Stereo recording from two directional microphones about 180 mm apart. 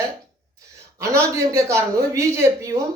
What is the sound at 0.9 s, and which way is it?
A woman's voice, 15° right (ahead or behind).